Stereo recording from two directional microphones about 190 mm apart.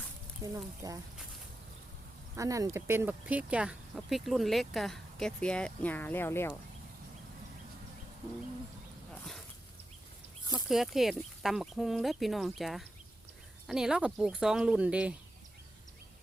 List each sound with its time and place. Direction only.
0.4 s speech: 15° right (ahead or behind)
2.3 s speech: 15° right (ahead or behind); by 6.6 s 10° left (ahead or behind)
10.5 s speech: centre (ahead or behind)